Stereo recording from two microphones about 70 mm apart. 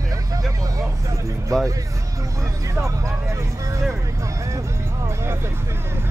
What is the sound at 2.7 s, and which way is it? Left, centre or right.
Speech, right.